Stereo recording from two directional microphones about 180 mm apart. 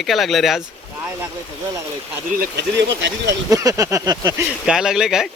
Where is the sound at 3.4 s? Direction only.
15° right (ahead or behind).